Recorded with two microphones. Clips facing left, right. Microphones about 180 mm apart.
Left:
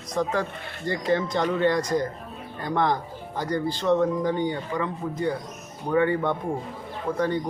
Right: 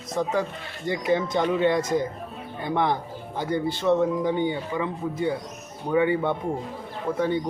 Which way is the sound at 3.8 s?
15° right (ahead or behind).